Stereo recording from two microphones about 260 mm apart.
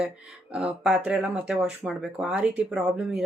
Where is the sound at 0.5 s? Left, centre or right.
Centre.